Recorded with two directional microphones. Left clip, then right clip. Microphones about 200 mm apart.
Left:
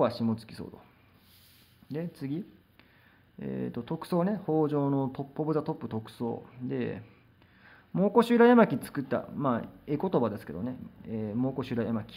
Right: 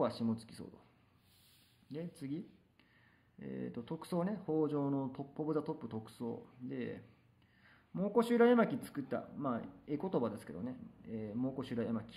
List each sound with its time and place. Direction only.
0.0 s speech: 20° left (ahead or behind)
1.9 s speech: 20° left (ahead or behind)